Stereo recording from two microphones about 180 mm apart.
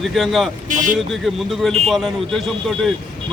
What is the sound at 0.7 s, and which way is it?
Speech, 45° right (ahead or behind).